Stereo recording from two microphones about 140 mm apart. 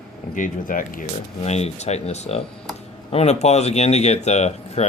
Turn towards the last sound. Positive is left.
turn(degrees=50)  # may be behind; listen again after turning